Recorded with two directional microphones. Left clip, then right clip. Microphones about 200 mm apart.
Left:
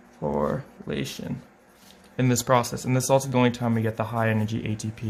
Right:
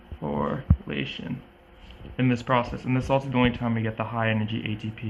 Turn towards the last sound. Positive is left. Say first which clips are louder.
# even
turn(degrees=60)  # may be behind; listen again after turning